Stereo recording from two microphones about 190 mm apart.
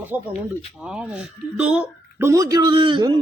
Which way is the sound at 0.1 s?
10° right (ahead or behind).